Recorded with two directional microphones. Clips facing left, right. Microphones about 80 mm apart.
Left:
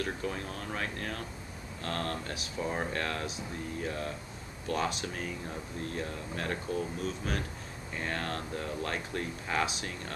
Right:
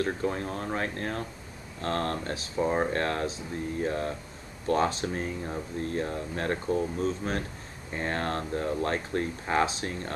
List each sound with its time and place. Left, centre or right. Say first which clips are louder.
0.0 s speech: right 6 dB; right